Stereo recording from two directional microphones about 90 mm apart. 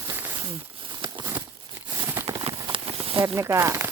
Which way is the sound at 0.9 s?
55° right (ahead or behind).